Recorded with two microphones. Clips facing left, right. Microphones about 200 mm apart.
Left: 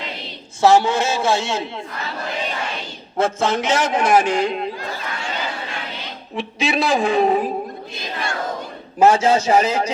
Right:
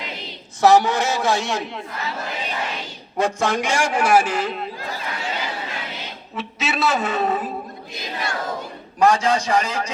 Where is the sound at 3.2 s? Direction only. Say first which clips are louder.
Left 2 dB; 15° right (ahead or behind).